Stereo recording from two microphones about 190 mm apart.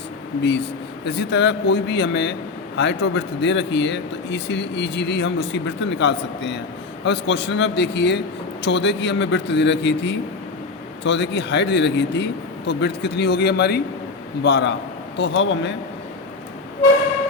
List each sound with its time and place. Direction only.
1.0 s a man's voice: 65° left (ahead or behind)